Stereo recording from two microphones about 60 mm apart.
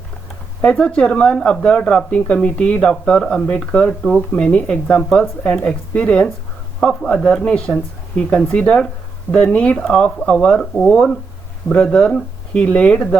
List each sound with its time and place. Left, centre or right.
0.6 s speech: left